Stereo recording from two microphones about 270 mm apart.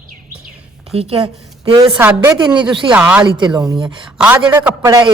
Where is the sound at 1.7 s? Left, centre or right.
Centre.